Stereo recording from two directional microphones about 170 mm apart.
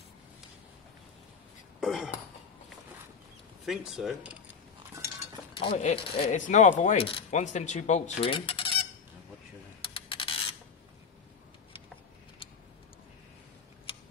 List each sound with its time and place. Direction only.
1.8 s cough: centre (ahead or behind)
3.6 s speech: centre (ahead or behind)
5.6 s speech: 40° left (ahead or behind)
9.8 s a sound: 30° left (ahead or behind)